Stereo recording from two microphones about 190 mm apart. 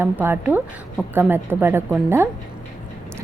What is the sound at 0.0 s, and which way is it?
A woman's voice, 10° right (ahead or behind).